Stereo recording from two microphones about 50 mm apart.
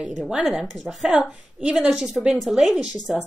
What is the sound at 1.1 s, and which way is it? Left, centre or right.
Speech, right.